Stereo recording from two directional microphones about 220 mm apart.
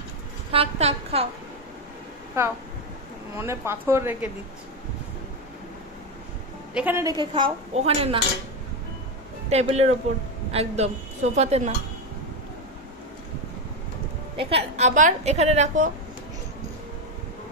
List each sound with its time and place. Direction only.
0.5 s a woman's voice: 25° right (ahead or behind)
3.3 s speech: 10° right (ahead or behind)
6.7 s a woman's voice: 10° right (ahead or behind); by 8.2 s 25° right (ahead or behind)
9.5 s a woman's voice: 30° right (ahead or behind)
14.3 s a woman's voice: 25° right (ahead or behind)